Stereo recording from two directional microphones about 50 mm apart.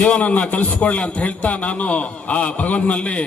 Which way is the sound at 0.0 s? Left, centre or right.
Left.